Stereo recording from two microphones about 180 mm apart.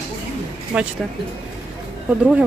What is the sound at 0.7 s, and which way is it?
Speech, 5° right (ahead or behind).